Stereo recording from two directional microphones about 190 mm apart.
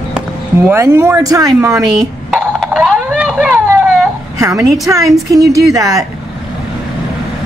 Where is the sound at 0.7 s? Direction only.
15° right (ahead or behind).